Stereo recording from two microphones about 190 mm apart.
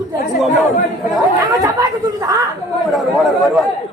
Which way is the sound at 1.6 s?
20° right (ahead or behind).